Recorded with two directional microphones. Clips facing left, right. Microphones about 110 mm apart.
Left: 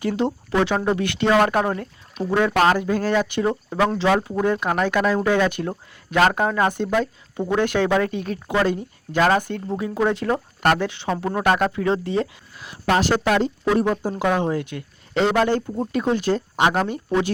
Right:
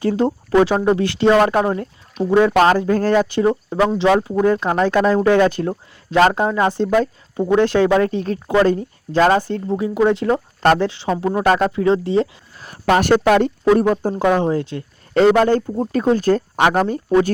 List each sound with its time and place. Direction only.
0.0 s speech: 35° right (ahead or behind)
2.6 s speech: 40° right (ahead or behind)
3.8 s speech: 25° right (ahead or behind)
9.7 s speech: 20° right (ahead or behind)
11.3 s speech: 15° right (ahead or behind)
11.5 s speech: 25° right (ahead or behind)
12.9 s speech: 55° right (ahead or behind)
13.7 s speech: 50° right (ahead or behind)
14.1 s speech: 35° right (ahead or behind)
15.1 s speech: 45° right (ahead or behind)